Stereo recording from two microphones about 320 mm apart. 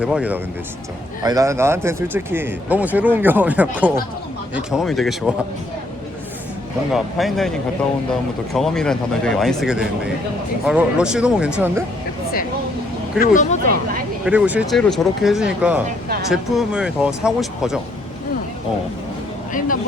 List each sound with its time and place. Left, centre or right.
0.0 s speech: centre
6.9 s speech: centre
8.5 s speech: centre
13.1 s speech: left
14.3 s speech: centre
19.5 s speech: left